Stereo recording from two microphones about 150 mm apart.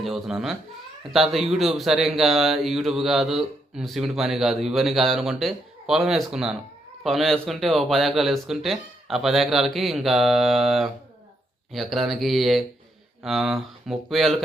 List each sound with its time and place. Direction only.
0.0 s a man's voice: centre (ahead or behind)